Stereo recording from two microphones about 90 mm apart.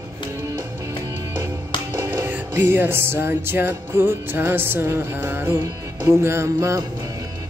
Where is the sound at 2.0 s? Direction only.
25° right (ahead or behind).